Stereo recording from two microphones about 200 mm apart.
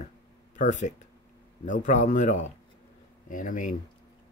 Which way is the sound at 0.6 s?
40° left (ahead or behind).